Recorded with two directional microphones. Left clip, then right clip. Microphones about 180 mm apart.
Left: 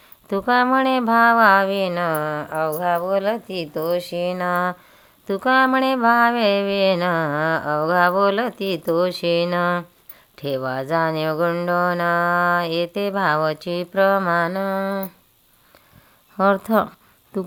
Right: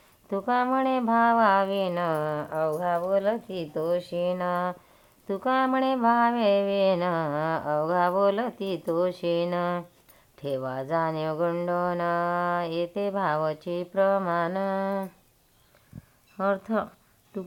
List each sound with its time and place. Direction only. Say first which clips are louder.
0.3 s speech: left 7 dB; 30° left (ahead or behind)
16.4 s speech: left 9 dB; 50° left (ahead or behind)